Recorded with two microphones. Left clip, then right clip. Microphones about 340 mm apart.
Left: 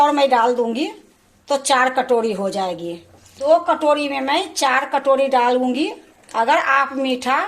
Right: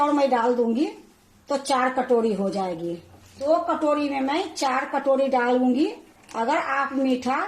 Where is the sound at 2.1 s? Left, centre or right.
Left.